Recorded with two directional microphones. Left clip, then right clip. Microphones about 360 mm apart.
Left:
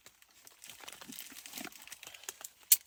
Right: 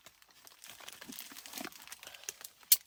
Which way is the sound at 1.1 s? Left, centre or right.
Centre.